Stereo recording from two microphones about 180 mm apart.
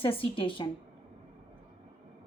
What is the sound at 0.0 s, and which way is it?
Speech, 30° left (ahead or behind).